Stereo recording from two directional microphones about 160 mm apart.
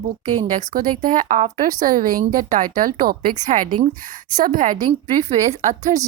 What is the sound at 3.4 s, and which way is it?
A woman's voice, 45° right (ahead or behind).